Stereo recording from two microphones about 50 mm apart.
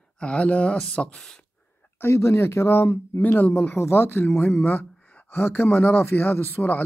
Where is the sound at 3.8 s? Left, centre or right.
Left.